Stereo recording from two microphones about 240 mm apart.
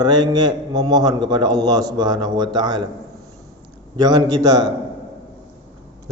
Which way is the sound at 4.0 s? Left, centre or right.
Centre.